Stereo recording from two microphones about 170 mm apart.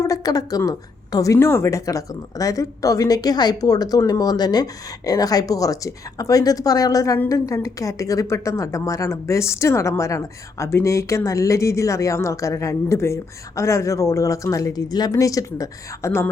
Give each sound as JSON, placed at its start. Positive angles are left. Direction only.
{"t": 0.0, "sound": "a woman's voice", "side_deg": 20}